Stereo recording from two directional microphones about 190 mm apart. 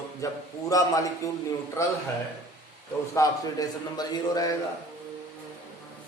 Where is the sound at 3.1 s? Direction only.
20° left (ahead or behind).